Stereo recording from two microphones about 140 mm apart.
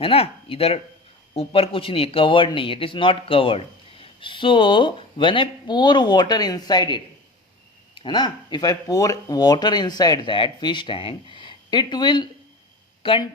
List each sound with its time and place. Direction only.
0.0 s speech: 45° left (ahead or behind)